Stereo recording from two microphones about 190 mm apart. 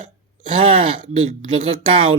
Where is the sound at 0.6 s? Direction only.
30° right (ahead or behind).